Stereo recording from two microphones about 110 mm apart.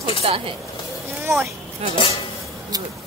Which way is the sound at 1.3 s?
25° right (ahead or behind).